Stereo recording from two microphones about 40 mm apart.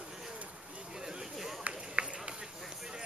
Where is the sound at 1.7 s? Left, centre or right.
Right.